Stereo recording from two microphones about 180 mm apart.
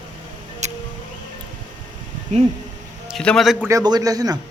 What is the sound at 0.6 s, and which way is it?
Music, 40° right (ahead or behind).